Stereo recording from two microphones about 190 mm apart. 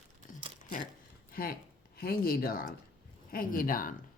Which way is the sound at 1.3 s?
50° left (ahead or behind).